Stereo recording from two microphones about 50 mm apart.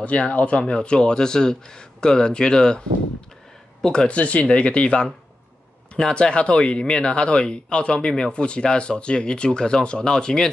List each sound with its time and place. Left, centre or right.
0.0 s speech: left
5.9 s speech: centre